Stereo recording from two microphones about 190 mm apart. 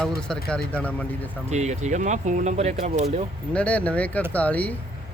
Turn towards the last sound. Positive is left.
turn(degrees=10)  # may be behind; listen again after turning